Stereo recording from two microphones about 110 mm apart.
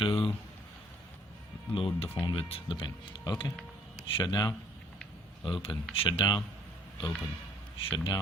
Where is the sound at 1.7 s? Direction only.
55° left (ahead or behind).